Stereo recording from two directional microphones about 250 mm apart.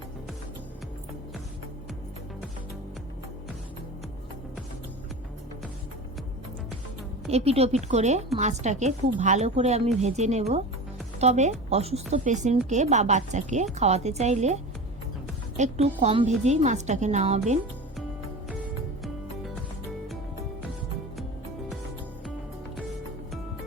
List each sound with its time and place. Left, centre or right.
7.3 s a woman's voice: right